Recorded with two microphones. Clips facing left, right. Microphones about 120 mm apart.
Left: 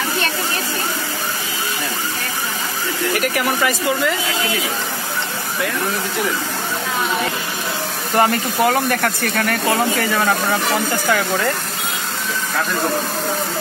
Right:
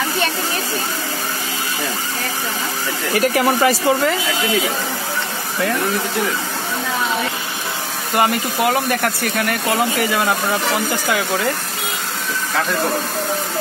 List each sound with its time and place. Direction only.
3.2 s speech: 30° right (ahead or behind)
8.1 s speech: 10° right (ahead or behind)